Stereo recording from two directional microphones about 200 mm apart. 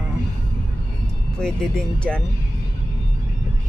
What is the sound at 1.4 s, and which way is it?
Speech, 5° left (ahead or behind).